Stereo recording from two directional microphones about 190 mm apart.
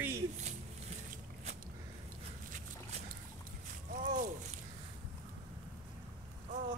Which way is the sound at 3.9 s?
40° right (ahead or behind).